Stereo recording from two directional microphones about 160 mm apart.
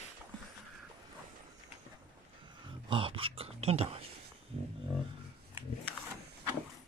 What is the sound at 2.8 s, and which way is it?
Speech, 35° right (ahead or behind).